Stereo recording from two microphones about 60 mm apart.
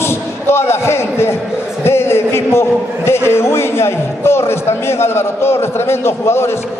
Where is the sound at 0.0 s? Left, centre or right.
Left.